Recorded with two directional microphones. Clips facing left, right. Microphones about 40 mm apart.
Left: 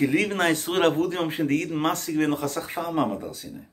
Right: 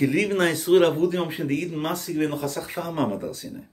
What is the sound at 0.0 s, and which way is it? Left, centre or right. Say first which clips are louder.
Speech: right 1 dB; left.